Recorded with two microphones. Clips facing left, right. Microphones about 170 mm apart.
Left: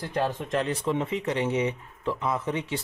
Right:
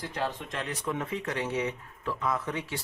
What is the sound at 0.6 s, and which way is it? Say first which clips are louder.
Speech: left 6 dB; 30° left (ahead or behind).